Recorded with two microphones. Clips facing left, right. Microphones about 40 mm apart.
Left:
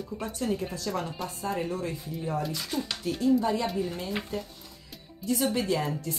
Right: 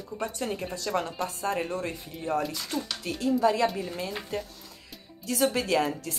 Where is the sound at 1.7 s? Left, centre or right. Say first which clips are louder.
Even; right.